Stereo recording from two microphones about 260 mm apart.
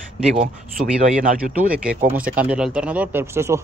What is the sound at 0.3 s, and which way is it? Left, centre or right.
Speech, right.